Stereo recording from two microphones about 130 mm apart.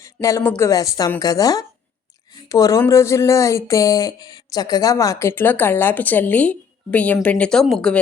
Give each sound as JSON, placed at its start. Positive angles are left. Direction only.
{"t": 0.0, "sound": "speech", "side_deg": 25}